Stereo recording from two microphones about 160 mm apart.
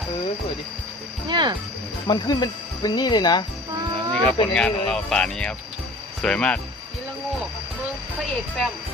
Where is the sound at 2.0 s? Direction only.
25° left (ahead or behind).